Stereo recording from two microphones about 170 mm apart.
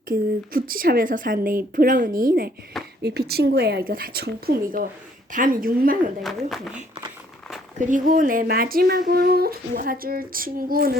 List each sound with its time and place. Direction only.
0.1 s speech: 55° right (ahead or behind)
3.0 s speech: 70° right (ahead or behind)
6.2 s a woman's voice: centre (ahead or behind)
7.8 s speech: 50° right (ahead or behind)